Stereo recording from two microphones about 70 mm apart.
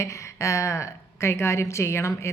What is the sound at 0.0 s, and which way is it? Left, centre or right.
A woman's voice, left.